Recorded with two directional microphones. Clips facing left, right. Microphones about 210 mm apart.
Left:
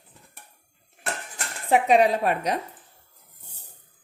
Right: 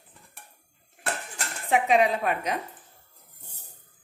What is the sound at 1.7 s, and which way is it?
Speech, 35° left (ahead or behind).